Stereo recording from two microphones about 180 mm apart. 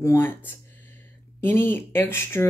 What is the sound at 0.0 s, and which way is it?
Speech, 15° left (ahead or behind).